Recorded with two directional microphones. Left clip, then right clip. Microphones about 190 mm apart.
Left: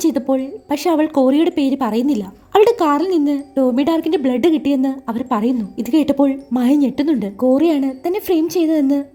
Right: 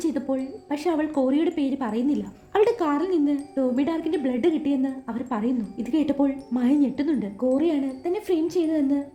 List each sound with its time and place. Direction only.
0.0 s speech: 40° left (ahead or behind)